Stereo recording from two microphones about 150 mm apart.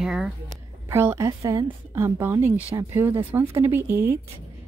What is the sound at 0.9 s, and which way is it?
Speech, 20° right (ahead or behind).